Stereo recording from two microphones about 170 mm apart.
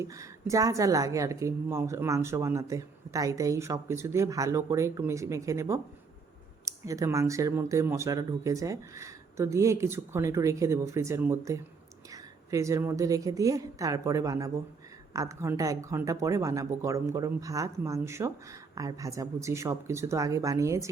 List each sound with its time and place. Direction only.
0.0 s a woman's voice: 20° right (ahead or behind)